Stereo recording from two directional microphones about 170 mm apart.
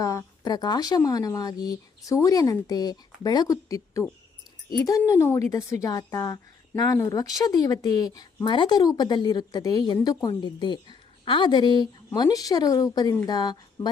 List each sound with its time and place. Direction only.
0.0 s a woman's voice: 20° left (ahead or behind)